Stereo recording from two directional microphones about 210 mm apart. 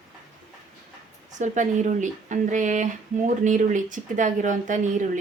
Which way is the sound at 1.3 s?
35° right (ahead or behind).